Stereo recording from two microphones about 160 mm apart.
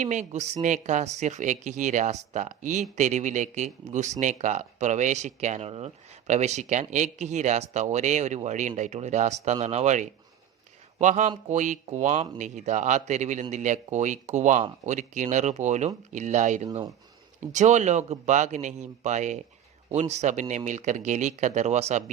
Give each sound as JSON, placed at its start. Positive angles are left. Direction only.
{"t": 0.0, "sound": "speech", "side_deg": -45}